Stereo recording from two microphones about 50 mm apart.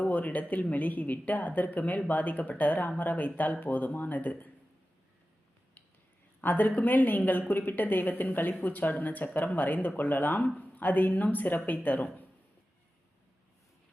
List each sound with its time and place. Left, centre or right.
0.0 s a woman's voice: left
6.4 s a woman's voice: left